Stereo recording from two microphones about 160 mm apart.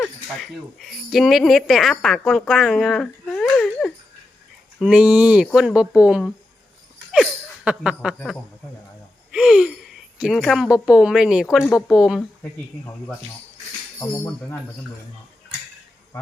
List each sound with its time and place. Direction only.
0.0 s speech: centre (ahead or behind)
9.3 s speech: 5° right (ahead or behind)
12.4 s speech: 15° left (ahead or behind)